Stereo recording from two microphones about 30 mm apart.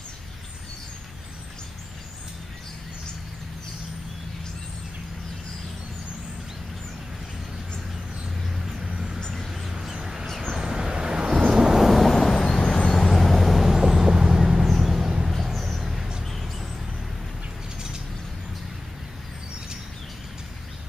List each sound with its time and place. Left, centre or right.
8.8 s a sound: centre
9.7 s crow: centre
10.5 s vehicle: centre
11.8 s vehicle: centre
12.1 s vehicle: centre
12.6 s vehicle: left
13.1 s vehicle: centre
14.7 s a sound: centre
15.3 s vehicle: centre
15.8 s a sound: centre
16.3 s mouse: centre